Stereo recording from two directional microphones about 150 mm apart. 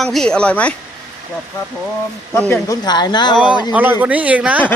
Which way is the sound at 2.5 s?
25° left (ahead or behind).